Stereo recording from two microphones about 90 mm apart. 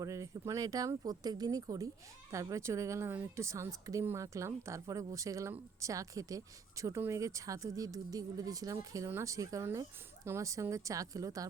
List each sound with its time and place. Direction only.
0.0 s speech: 35° right (ahead or behind)